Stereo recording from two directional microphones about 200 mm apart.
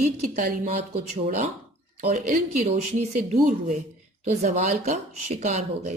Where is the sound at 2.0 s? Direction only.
35° right (ahead or behind).